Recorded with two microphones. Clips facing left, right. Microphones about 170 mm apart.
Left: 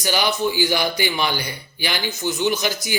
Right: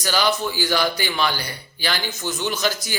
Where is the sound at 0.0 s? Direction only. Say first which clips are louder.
Left 1 dB; 15° left (ahead or behind).